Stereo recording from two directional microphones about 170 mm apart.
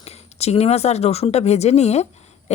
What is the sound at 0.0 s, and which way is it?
Speech, 40° left (ahead or behind).